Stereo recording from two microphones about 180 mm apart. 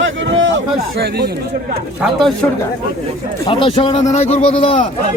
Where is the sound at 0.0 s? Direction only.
90° right.